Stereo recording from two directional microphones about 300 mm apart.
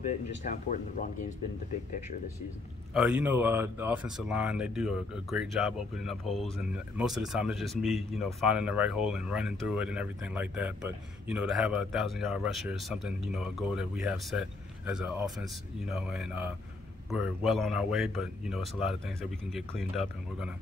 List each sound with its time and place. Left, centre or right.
0.1 s speech: left
2.9 s speech: centre